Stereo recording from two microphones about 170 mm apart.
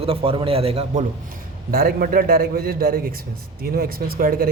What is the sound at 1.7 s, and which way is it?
A man's voice, 60° right (ahead or behind).